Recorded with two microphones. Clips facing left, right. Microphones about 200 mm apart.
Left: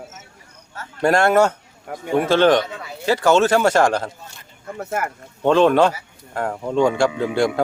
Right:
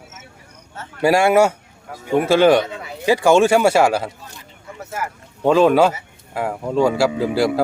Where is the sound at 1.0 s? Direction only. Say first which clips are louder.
Right 1 dB; 10° right (ahead or behind).